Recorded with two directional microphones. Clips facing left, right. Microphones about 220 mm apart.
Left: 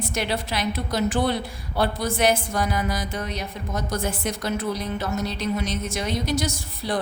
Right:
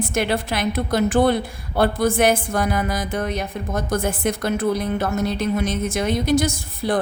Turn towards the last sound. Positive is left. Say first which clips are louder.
# right 5 dB
turn(degrees=-50)  # may be behind; listen again after turning